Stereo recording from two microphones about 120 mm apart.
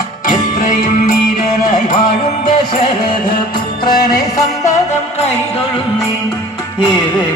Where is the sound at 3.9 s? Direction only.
35° left (ahead or behind).